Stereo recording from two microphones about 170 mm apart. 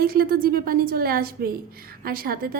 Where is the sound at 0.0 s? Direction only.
60° right (ahead or behind).